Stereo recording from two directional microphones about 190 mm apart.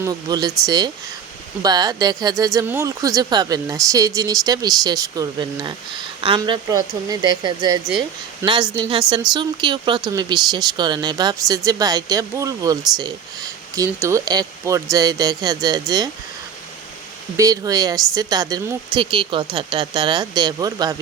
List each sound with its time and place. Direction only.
0.0 s speech: 20° right (ahead or behind)
17.3 s speech: 20° right (ahead or behind)